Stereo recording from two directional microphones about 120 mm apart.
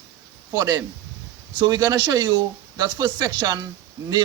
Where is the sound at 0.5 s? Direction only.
30° right (ahead or behind).